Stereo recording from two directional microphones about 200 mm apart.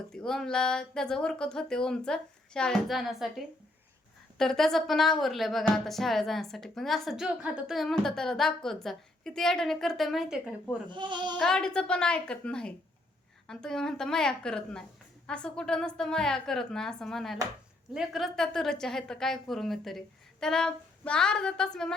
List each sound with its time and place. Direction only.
0.1 s speech: 5° left (ahead or behind)
10.8 s speech: 25° right (ahead or behind)
11.3 s speech: 5° left (ahead or behind)